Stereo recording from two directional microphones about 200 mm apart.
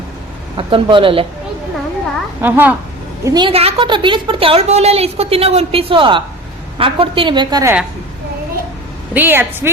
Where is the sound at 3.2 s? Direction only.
20° right (ahead or behind).